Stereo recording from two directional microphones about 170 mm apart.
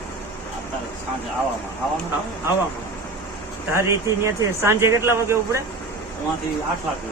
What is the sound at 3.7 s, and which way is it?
A man's voice, 15° right (ahead or behind).